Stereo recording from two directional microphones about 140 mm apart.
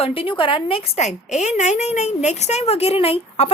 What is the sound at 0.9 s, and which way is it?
A woman's voice, 55° left (ahead or behind).